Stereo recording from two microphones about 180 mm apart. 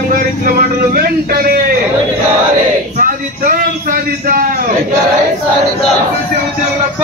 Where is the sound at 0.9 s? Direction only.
55° right (ahead or behind).